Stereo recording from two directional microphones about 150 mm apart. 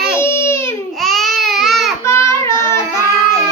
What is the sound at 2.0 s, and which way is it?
Child singing, 20° left (ahead or behind).